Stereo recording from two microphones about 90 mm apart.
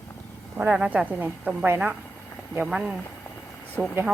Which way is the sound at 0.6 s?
15° right (ahead or behind).